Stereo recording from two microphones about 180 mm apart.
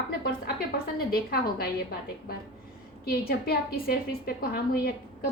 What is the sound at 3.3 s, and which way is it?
A woman's voice, 60° left (ahead or behind).